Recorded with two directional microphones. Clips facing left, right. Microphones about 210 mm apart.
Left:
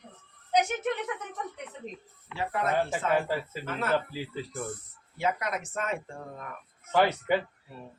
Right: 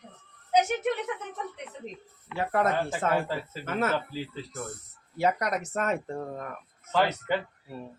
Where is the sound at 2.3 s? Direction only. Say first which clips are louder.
Right 3 dB; 50° right (ahead or behind).